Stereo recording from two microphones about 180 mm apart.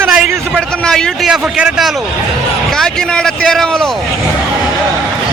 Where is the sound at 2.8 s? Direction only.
5° left (ahead or behind).